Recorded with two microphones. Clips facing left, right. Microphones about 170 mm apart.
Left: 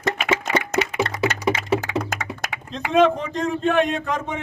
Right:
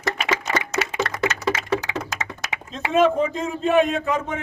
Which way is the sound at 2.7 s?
5° right (ahead or behind).